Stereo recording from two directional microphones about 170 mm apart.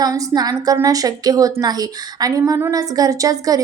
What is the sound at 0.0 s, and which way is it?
Speech, 20° right (ahead or behind).